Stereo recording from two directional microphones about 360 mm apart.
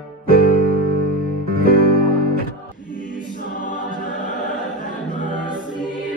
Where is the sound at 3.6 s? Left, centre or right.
Left.